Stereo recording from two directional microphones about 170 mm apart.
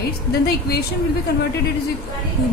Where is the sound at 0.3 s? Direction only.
65° left (ahead or behind).